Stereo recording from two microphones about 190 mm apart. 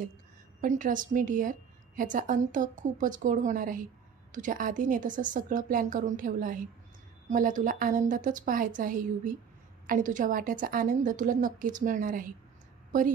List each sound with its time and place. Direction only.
0.6 s a woman's voice: 45° right (ahead or behind)